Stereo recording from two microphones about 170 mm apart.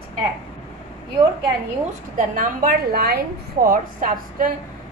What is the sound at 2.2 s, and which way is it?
A woman's voice, 50° right (ahead or behind).